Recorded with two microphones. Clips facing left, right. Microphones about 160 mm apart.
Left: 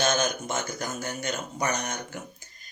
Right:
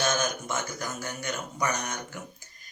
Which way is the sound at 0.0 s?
25° left (ahead or behind).